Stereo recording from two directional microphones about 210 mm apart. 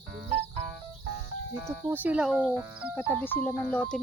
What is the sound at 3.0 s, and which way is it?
Speech, 10° left (ahead or behind).